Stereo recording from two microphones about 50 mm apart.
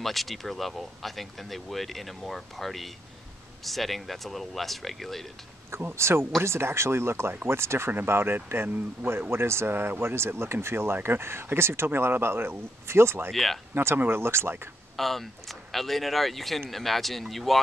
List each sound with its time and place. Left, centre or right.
0.0 s speech: centre
5.9 s speech: right
7.9 s speech: right
9.3 s speech: right
13.3 s speech: centre
13.7 s speech: right
15.0 s speech: centre